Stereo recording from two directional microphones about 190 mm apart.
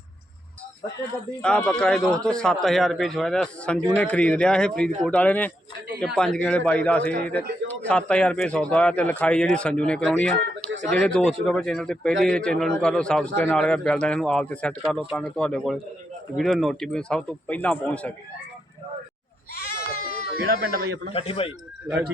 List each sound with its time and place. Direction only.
1.4 s a man's voice: 5° left (ahead or behind)
19.9 s bleat: 50° left (ahead or behind)
20.6 s a man's voice: 60° right (ahead or behind)
21.1 s speech: 30° left (ahead or behind)